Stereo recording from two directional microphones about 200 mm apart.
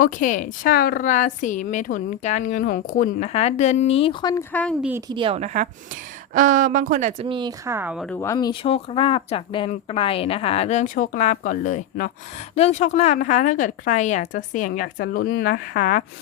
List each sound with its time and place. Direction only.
0.0 s a woman's voice: 40° left (ahead or behind); by 4.4 s 20° left (ahead or behind)
4.8 s a woman's voice: 10° right (ahead or behind)
5.0 s a woman's voice: 25° right (ahead or behind); by 8.1 s 5° right (ahead or behind)
8.1 s a woman's voice: 15° left (ahead or behind); by 16.0 s 40° left (ahead or behind)